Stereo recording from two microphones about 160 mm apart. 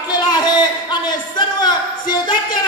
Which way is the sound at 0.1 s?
25° left (ahead or behind).